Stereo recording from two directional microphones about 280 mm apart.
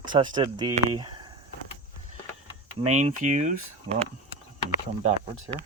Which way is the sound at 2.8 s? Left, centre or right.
Right.